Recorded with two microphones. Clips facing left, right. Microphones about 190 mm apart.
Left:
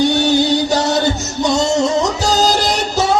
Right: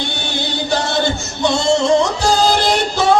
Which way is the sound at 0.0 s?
40° left (ahead or behind).